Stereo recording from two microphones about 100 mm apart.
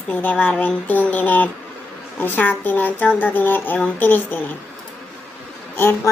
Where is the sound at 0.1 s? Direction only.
15° left (ahead or behind).